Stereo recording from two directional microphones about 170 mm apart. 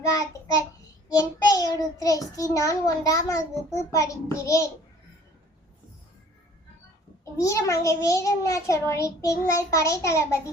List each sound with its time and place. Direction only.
0.2 s child singing: 20° left (ahead or behind)
7.4 s child singing: 20° left (ahead or behind)